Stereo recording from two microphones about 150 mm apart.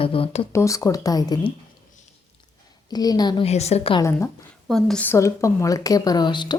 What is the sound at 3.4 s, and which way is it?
Speech, 45° left (ahead or behind).